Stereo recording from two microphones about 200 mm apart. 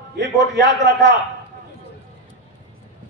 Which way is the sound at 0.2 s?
60° right (ahead or behind).